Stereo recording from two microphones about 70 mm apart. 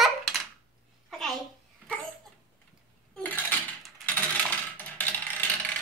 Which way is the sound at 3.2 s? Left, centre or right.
Left.